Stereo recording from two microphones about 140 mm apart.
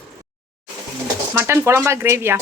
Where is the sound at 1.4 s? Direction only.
20° right (ahead or behind).